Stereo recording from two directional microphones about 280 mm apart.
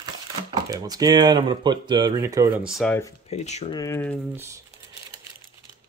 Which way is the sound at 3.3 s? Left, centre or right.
Left.